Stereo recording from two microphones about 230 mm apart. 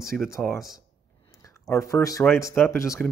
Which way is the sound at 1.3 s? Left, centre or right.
Centre.